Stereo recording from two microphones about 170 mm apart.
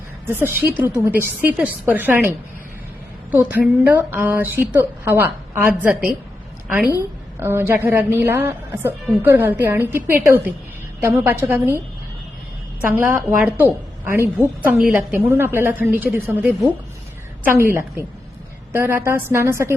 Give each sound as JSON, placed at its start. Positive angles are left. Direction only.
{"t": 0.3, "sound": "a woman's voice", "side_deg": -10}
{"t": 3.3, "sound": "a woman's voice", "side_deg": -10}
{"t": 7.3, "sound": "a woman's voice", "side_deg": -15}
{"t": 12.9, "sound": "a woman's voice", "side_deg": -10}